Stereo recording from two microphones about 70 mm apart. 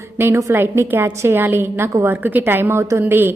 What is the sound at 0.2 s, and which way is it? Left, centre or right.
A woman's voice, right.